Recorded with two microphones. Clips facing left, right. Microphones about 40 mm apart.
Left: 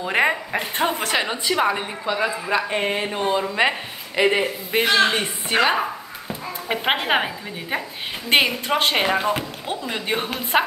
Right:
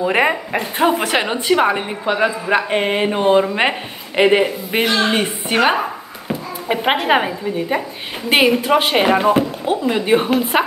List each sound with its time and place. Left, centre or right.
0.0 s speech: centre
1.1 s a woman's voice: right
5.1 s speech: centre
6.7 s a woman's voice: centre